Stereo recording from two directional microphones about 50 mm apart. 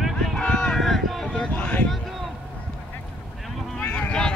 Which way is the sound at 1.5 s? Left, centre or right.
Left.